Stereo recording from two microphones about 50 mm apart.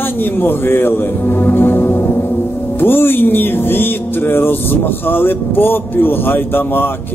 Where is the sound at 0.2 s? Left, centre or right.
Left.